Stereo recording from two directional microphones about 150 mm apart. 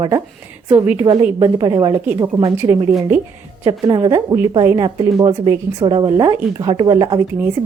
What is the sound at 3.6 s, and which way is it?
A woman's voice, 30° right (ahead or behind).